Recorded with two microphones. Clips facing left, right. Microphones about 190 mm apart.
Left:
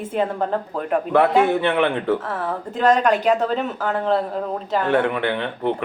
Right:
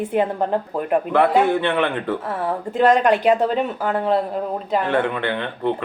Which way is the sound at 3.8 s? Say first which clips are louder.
Even; 5° right (ahead or behind).